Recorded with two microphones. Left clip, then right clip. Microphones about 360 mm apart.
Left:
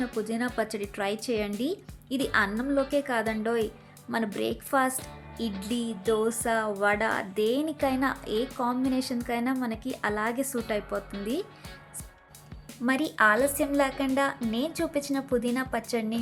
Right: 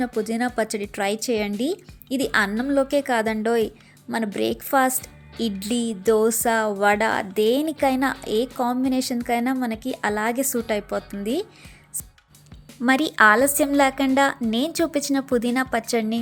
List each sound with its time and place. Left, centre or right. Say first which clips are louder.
0.2 s speech: right 6 dB; centre
12.8 s speech: right 7 dB; centre